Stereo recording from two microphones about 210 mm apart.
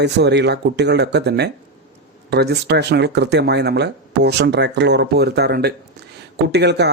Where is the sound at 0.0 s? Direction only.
55° right (ahead or behind).